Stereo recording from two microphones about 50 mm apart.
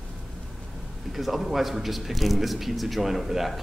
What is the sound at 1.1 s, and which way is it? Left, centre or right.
A man's voice, centre.